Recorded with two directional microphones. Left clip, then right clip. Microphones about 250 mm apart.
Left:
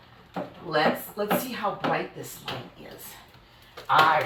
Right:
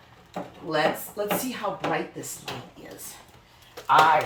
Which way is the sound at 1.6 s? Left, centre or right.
Right.